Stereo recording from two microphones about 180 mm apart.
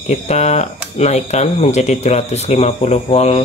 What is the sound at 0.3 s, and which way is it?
Speech, 40° left (ahead or behind).